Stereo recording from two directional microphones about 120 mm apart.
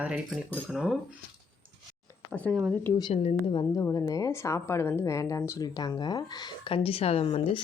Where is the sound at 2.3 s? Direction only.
10° left (ahead or behind).